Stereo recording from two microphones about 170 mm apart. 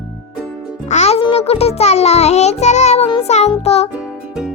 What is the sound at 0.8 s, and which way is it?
A child's voice, 40° left (ahead or behind).